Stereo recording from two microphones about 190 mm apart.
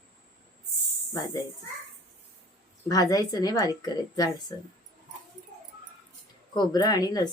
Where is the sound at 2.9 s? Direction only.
20° left (ahead or behind).